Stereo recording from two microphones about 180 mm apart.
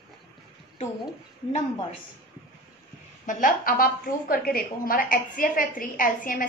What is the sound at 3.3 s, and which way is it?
A woman's voice, 50° left (ahead or behind).